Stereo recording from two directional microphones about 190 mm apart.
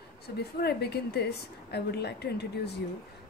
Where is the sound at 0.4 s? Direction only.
55° left (ahead or behind).